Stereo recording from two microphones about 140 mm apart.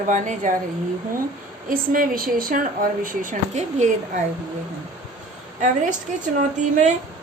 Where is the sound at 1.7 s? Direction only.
90° right; by 3.9 s 55° right (ahead or behind).